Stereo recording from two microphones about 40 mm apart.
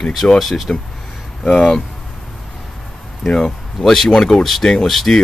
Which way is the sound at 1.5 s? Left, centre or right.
Left.